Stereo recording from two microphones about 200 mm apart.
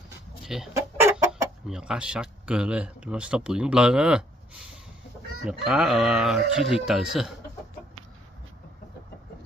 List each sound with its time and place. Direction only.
0.4 s chicken: centre (ahead or behind)
1.7 s speech: 5° right (ahead or behind)
5.5 s speech: centre (ahead or behind)